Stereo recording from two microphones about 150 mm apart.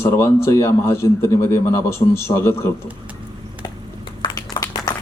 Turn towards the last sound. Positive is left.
turn(degrees=25)  # may be behind; listen again after turning